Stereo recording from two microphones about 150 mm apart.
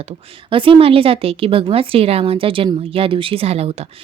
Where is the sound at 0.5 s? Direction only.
35° right (ahead or behind).